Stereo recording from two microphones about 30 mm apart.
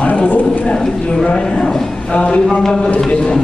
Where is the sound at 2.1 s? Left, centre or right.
Left.